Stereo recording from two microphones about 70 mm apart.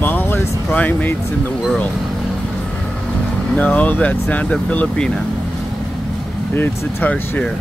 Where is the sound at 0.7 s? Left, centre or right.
Left.